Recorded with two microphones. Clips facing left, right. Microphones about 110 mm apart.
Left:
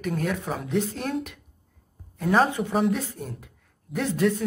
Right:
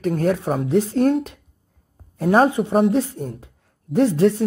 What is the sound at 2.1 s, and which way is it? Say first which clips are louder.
Speech: right 6 dB; 35° right (ahead or behind).